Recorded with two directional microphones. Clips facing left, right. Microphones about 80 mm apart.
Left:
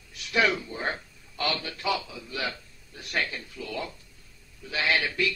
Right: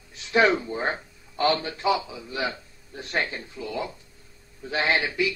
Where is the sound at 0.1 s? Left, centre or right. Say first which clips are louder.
Right 5 dB; right.